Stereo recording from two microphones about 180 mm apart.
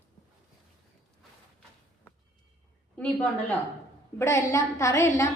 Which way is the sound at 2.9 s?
5° left (ahead or behind).